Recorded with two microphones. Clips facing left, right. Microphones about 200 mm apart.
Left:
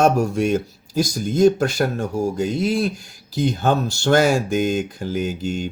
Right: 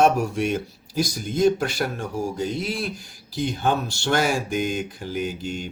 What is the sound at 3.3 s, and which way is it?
Speech, 45° left (ahead or behind).